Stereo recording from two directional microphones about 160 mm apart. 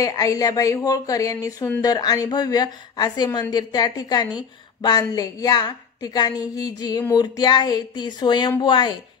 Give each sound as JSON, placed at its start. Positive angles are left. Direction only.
{"t": 0.0, "sound": "a woman's voice", "side_deg": 20}